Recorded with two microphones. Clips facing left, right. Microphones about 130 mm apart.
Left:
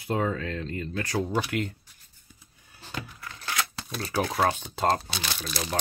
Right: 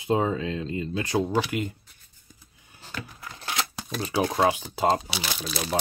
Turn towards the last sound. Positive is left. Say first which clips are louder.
# right 2 dB
turn(degrees=-5)  # may be behind; listen again after turning